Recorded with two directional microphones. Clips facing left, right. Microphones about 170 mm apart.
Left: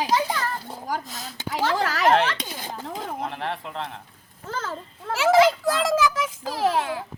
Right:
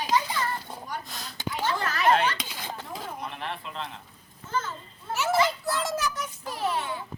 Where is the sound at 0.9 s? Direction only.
90° left.